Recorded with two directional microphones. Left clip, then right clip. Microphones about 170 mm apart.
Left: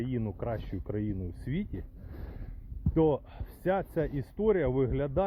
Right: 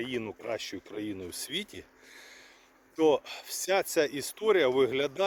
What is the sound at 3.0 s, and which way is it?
Speech, 20° right (ahead or behind).